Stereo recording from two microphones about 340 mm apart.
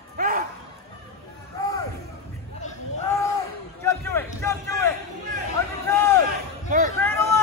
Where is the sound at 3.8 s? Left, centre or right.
Centre.